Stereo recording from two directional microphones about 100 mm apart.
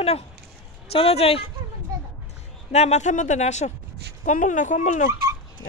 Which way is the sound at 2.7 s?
90° left.